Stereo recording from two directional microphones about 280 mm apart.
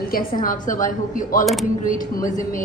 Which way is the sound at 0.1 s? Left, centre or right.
Left.